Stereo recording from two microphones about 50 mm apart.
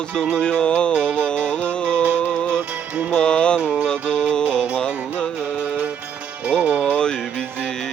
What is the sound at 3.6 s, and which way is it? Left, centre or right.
Music, right.